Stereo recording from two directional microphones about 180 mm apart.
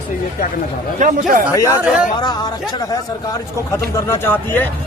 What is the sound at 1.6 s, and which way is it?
Speech, 20° left (ahead or behind).